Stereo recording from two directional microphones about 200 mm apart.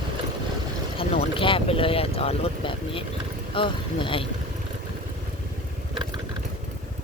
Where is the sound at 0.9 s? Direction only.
30° left (ahead or behind).